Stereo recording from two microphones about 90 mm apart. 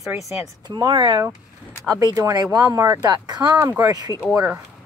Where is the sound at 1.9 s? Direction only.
45° right (ahead or behind).